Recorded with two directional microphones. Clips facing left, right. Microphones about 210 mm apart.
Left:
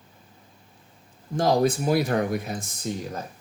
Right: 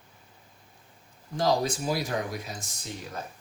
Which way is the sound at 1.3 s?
55° left (ahead or behind).